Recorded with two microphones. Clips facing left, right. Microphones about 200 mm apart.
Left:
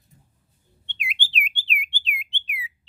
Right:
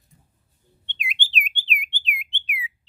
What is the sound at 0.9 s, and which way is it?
Bird, 20° right (ahead or behind).